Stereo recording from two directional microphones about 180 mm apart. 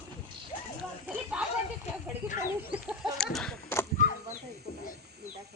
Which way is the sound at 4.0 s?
45° left (ahead or behind).